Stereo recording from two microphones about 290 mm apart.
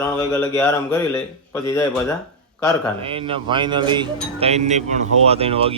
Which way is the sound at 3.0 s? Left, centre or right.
Centre.